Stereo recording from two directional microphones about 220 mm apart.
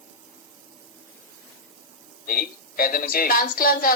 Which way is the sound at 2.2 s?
40° left (ahead or behind).